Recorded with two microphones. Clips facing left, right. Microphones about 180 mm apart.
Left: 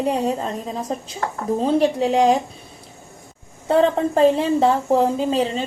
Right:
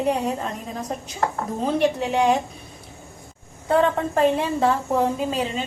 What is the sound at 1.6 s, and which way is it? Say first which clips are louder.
Speech: left 3 dB; 30° left (ahead or behind).